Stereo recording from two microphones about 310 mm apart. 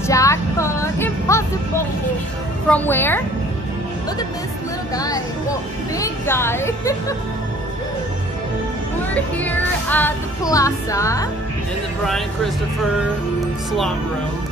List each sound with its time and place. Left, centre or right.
0.0 s music: centre
2.7 s music: centre
4.9 s music: centre
9.1 s music: centre